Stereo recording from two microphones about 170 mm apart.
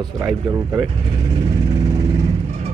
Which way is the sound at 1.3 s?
35° right (ahead or behind).